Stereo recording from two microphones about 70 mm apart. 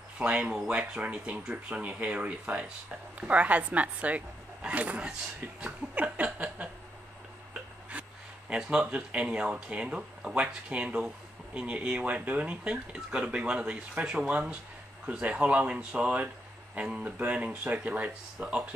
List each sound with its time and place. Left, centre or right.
0.2 s a woman's voice: centre
5.6 s chuckle: centre
7.9 s a sound: centre
8.5 s a woman's voice: centre